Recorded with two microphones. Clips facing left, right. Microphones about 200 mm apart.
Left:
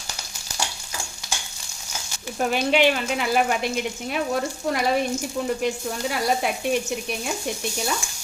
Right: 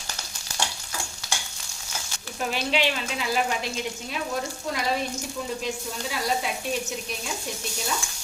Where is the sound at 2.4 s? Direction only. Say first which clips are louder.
Left 6 dB; 50° left (ahead or behind).